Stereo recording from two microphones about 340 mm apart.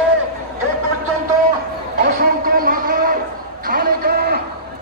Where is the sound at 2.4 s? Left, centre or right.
Right.